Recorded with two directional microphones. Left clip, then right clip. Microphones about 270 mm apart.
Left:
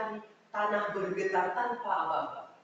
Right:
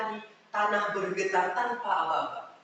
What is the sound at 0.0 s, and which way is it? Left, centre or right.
Speech, centre.